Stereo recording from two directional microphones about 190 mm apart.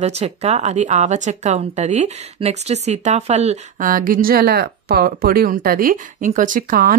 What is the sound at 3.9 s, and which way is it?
Speech, 50° right (ahead or behind).